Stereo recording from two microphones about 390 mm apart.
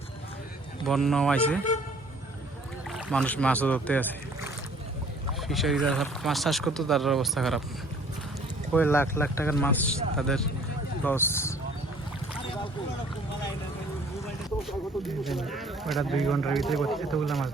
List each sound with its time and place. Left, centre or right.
0.9 s speech: centre
2.9 s speech: centre
5.4 s speech: centre
8.7 s speech: centre
14.7 s speech: centre